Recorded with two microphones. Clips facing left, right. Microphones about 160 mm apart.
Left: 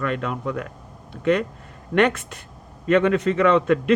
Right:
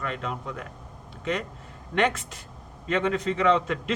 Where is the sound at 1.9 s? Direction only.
60° left (ahead or behind).